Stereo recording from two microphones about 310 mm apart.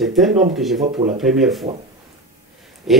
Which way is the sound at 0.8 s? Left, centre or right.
Right.